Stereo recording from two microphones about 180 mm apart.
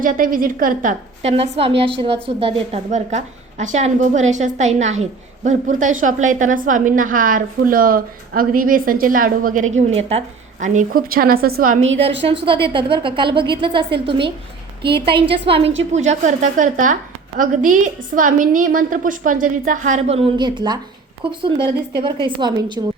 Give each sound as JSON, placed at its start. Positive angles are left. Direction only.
{"t": 0.0, "sound": "a woman's voice", "side_deg": -50}
{"t": 9.9, "sound": "a woman's voice", "side_deg": -35}
{"t": 12.2, "sound": "a woman's voice", "side_deg": -30}